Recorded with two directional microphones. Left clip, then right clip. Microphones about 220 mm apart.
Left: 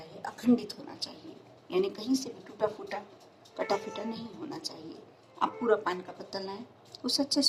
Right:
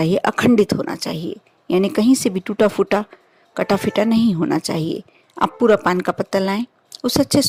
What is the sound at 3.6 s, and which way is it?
Speech, 10° right (ahead or behind).